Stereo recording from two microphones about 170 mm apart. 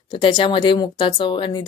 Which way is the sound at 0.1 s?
30° left (ahead or behind).